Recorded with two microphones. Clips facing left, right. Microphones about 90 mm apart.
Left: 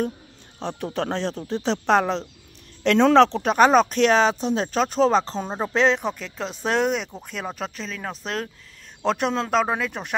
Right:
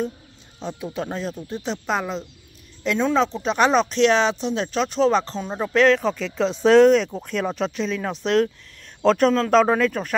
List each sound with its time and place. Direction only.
0.6 s a man's voice: 65° left (ahead or behind)
3.5 s speech: 45° left (ahead or behind); by 6.1 s 20° left (ahead or behind)
6.1 s speech: 5° left (ahead or behind)
9.5 s speech: 5° left (ahead or behind)